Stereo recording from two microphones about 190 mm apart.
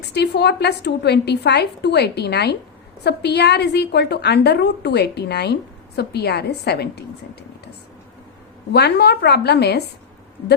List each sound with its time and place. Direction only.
0.1 s a woman's voice: 60° left (ahead or behind)
8.7 s a woman's voice: 60° left (ahead or behind)